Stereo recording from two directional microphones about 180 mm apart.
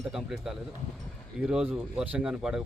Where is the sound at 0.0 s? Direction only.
Centre (ahead or behind).